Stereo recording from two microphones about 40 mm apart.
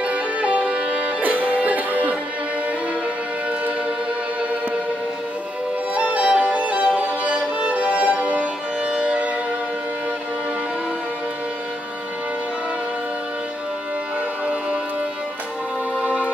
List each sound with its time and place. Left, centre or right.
0.0 s music: right
1.2 s music: right
5.9 s music: right
14.4 s music: right
16.0 s music: right